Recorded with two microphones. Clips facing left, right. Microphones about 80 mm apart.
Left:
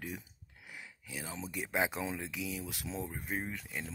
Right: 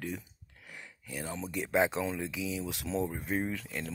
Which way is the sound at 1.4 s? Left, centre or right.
Centre.